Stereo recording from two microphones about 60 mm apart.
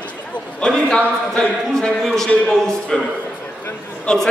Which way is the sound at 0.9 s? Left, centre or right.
Centre.